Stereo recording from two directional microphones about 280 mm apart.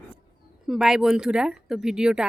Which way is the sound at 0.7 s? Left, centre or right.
Centre.